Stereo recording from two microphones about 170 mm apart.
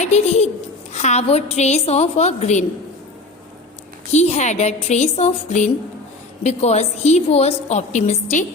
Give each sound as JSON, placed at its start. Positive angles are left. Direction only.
{"t": 0.0, "sound": "a woman's voice", "side_deg": 40}
{"t": 4.1, "sound": "a woman's voice", "side_deg": 40}